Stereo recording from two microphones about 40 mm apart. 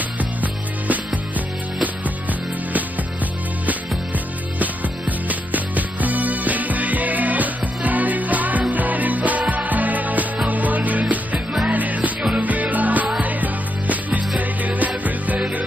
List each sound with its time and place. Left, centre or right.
0.2 s music: right
5.3 s music: right